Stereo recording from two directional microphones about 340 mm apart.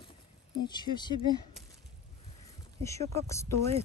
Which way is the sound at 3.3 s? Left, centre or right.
Centre.